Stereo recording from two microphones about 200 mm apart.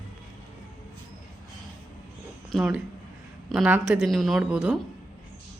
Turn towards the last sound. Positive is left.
turn(degrees=-5)  # may be behind; listen again after turning